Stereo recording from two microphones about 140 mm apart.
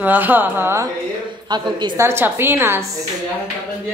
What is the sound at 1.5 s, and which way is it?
Speech, 30° right (ahead or behind).